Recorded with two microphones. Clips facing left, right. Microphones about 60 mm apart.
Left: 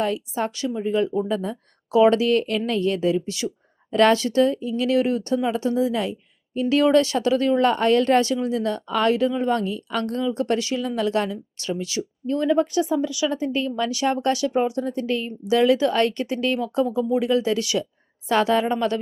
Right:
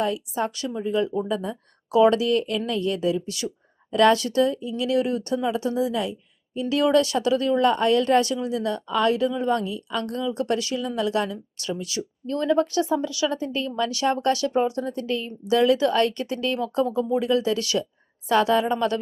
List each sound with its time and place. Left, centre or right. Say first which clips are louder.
0.0 s a woman's voice: left 1 dB; left